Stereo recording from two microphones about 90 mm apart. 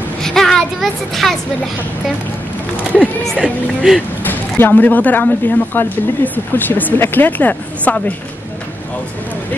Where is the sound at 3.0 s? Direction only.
15° right (ahead or behind).